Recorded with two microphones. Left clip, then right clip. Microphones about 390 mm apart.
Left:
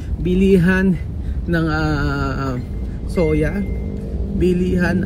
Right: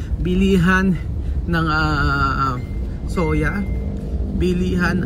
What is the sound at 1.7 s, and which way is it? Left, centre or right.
Speech, right.